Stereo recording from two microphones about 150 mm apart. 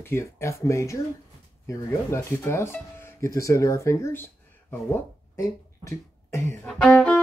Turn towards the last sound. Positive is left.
turn(degrees=5)  # may be behind; listen again after turning